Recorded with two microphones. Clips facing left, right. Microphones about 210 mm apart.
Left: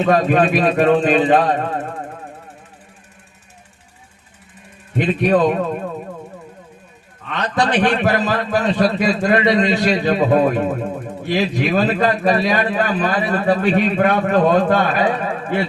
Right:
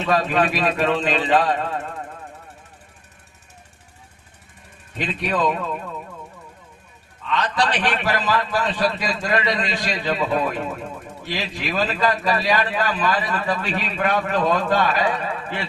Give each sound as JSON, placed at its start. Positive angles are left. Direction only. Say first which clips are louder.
{"t": 0.0, "sound": "speech", "louder": "left 5 dB", "side_deg": 45}
{"t": 5.0, "sound": "speech", "louder": "left 7 dB", "side_deg": 40}
{"t": 7.3, "sound": "a man's voice", "louder": "left 3 dB", "side_deg": 50}
{"t": 11.4, "sound": "a man's voice", "louder": "left 6 dB", "side_deg": 40}
{"t": 11.9, "sound": "a man's voice", "louder": "left 5 dB", "side_deg": 55}
{"t": 13.6, "sound": "speech", "louder": "left 9 dB", "side_deg": 50}
{"t": 14.1, "sound": "speech", "louder": "left 3 dB", "side_deg": 55}